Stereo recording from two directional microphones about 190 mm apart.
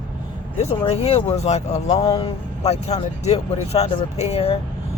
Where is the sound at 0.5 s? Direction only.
30° left (ahead or behind).